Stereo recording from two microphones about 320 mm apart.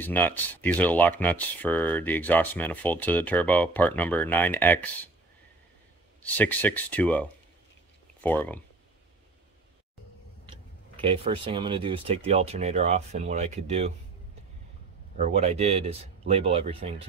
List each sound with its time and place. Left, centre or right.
0.0 s speech: centre
6.2 s speech: centre
11.0 s speech: centre
15.1 s speech: right